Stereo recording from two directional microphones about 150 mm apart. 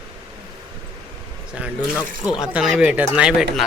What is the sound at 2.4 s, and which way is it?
Speech, centre (ahead or behind).